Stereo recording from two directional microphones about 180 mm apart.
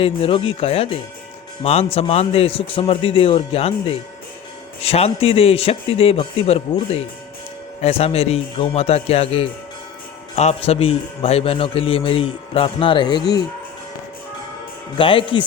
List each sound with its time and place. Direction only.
0.0 s a man's voice: 30° left (ahead or behind)
14.9 s speech: 30° left (ahead or behind)